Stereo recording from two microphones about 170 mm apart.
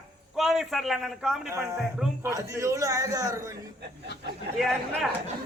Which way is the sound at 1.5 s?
15° right (ahead or behind).